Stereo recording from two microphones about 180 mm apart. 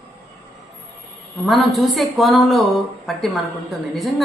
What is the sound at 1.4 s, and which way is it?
A woman's voice, centre (ahead or behind).